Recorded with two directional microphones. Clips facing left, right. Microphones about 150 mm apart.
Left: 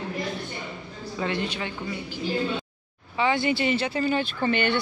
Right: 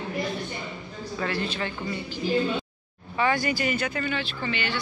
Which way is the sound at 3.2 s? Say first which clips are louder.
Left 1 dB; 20° left (ahead or behind).